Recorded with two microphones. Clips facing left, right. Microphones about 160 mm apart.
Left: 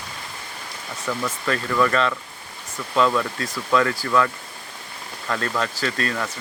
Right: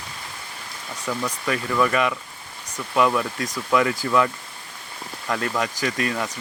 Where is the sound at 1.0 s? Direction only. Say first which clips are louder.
Left 1 dB; 10° right (ahead or behind).